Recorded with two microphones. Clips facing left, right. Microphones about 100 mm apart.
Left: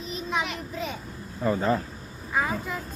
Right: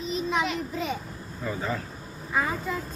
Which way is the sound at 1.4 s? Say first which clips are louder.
Left 7 dB; 45° left (ahead or behind).